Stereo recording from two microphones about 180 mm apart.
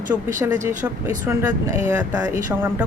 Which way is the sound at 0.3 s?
10° right (ahead or behind).